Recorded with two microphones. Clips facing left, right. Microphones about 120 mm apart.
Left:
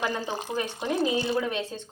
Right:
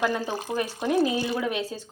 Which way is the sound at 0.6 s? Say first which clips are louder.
Right 4 dB; 10° right (ahead or behind).